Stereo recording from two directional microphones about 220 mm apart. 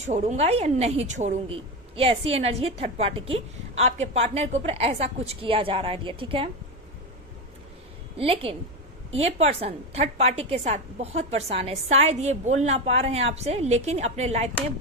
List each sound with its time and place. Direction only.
0.1 s a woman's voice: 30° right (ahead or behind)
8.2 s a woman's voice: 25° right (ahead or behind)